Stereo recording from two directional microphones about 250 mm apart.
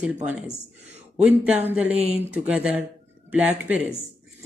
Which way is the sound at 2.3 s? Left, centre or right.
Centre.